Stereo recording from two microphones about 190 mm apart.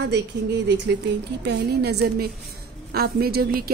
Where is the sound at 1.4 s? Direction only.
60° right (ahead or behind).